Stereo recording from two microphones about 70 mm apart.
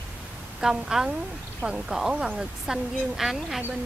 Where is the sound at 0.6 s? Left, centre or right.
Centre.